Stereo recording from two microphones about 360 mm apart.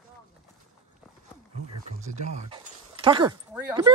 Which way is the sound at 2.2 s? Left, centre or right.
Centre.